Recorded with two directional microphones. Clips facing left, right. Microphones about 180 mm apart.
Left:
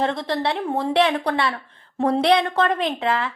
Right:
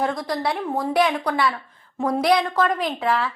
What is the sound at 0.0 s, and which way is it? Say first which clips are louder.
A woman's voice: left 1 dB; 25° left (ahead or behind).